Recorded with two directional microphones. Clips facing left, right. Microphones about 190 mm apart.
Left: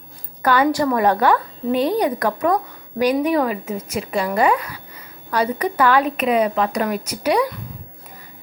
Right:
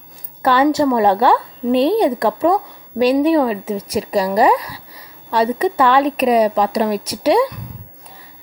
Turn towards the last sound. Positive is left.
turn(degrees=-30)  # may be behind; listen again after turning